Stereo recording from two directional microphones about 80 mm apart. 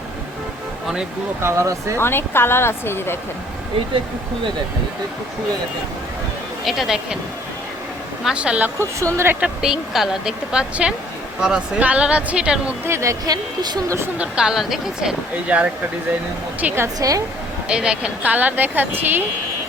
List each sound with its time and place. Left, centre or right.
1.4 s speech: right
2.0 s speech: left
6.7 s speech: centre
8.2 s speech: centre
9.0 s speech: right
9.4 s speech: centre
12.8 s speech: right
13.2 s a woman's voice: right
13.8 s speech: right
14.2 s speech: centre
15.4 s speech: centre
17.0 s a woman's voice: right
17.7 s speech: centre